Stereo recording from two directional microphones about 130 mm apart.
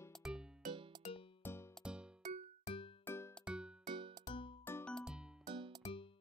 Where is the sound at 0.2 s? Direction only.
5° right (ahead or behind).